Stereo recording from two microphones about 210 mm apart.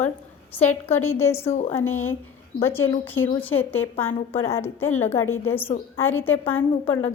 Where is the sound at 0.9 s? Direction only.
10° left (ahead or behind).